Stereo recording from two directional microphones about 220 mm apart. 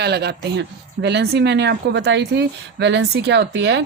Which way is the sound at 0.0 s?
50° right (ahead or behind).